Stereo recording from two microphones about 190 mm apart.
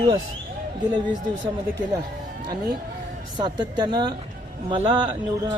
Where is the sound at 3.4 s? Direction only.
25° right (ahead or behind).